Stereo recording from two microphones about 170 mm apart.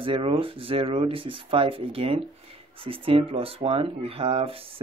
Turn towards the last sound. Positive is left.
turn(degrees=-35)  # may be behind; listen again after turning